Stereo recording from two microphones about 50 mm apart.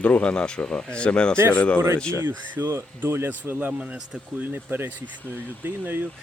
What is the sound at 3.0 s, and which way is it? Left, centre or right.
Speech, right.